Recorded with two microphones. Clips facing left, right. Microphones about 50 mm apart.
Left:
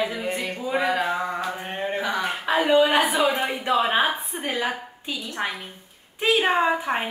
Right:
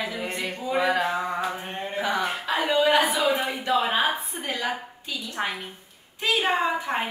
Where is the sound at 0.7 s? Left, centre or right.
Centre.